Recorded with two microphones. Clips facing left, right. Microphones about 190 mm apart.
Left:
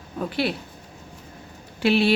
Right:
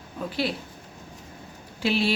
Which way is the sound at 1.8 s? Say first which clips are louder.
Left 5 dB; 60° left (ahead or behind).